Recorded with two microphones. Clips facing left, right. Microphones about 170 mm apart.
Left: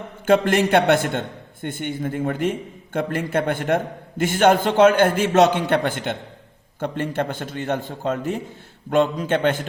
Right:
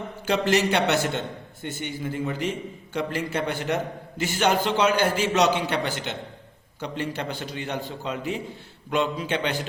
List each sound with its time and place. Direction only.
0.3 s a man's voice: 50° left (ahead or behind)